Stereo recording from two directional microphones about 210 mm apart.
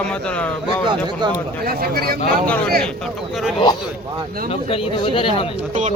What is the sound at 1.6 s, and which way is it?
Speech, 45° right (ahead or behind).